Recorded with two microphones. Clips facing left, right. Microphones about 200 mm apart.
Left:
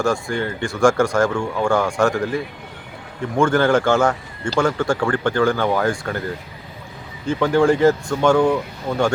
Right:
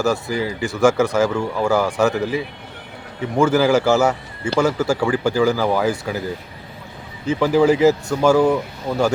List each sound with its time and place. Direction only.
0.0 s speech: 5° right (ahead or behind)